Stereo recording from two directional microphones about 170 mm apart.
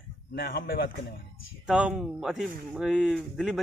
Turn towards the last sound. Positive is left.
turn(degrees=0)  # may be behind; listen again after turning